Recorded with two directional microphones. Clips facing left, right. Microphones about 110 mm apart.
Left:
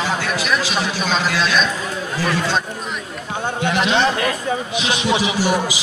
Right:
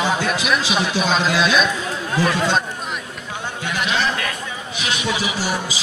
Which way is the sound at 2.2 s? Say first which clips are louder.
Right 3 dB; 20° right (ahead or behind).